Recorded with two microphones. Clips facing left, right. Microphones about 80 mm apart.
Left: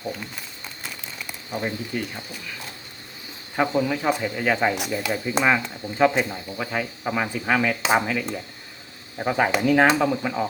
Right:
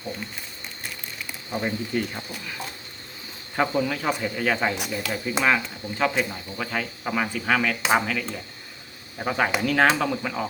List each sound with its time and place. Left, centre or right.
1.5 s speech: centre
3.5 s speech: centre